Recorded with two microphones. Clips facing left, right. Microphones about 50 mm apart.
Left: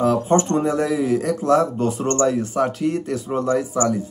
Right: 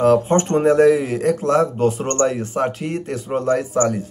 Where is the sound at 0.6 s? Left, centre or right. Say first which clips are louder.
Right 6 dB; right.